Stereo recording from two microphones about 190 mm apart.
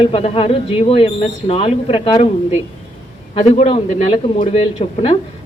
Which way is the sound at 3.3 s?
30° left (ahead or behind).